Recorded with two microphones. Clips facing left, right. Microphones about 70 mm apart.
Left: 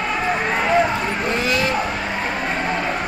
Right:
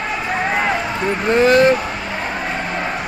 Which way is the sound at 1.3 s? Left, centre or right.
Right.